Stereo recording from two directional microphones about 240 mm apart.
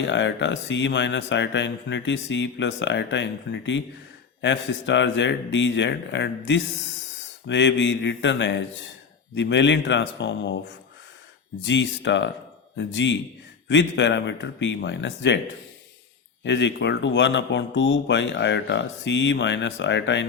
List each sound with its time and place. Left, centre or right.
0.1 s speech: left
11.6 s speech: left
16.4 s speech: left